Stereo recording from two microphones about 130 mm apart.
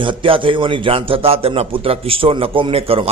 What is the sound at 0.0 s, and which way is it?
A man's voice, 40° right (ahead or behind).